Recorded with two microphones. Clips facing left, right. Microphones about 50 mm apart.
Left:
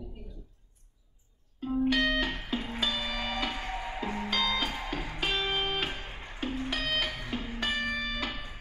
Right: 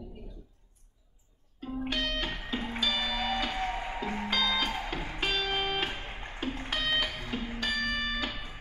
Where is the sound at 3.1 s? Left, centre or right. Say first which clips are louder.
Right 3 dB; left.